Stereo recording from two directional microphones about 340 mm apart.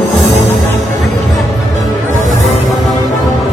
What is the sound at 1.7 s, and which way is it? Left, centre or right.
Music, left.